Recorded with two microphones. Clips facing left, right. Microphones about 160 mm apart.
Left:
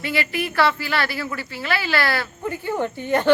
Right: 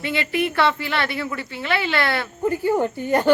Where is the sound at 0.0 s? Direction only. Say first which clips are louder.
Right 2 dB; 25° right (ahead or behind).